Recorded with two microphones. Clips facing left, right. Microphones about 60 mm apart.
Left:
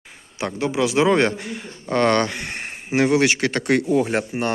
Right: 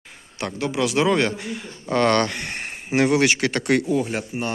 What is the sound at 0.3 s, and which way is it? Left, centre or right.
Speech, centre.